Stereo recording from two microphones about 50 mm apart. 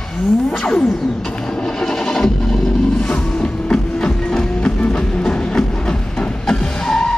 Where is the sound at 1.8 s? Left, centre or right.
Centre.